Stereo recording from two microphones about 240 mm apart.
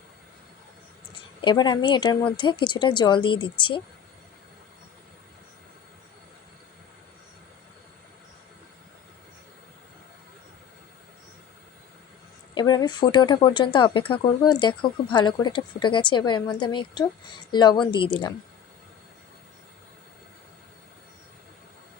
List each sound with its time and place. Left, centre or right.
1.4 s speech: centre
12.5 s speech: centre